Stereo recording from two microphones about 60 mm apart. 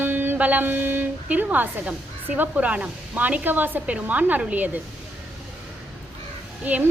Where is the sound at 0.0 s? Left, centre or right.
Right.